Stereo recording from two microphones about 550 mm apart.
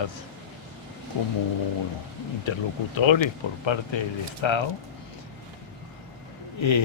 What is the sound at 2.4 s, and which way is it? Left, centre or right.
Speech, left.